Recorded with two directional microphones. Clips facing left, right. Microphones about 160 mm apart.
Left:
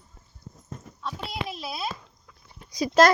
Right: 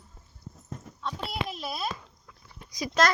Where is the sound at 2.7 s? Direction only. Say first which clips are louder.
Left 7 dB; 30° left (ahead or behind).